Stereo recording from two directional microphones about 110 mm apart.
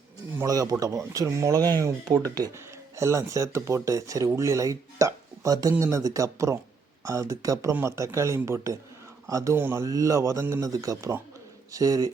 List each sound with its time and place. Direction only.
0.4 s speech: 35° right (ahead or behind)
2.9 s speech: 30° right (ahead or behind)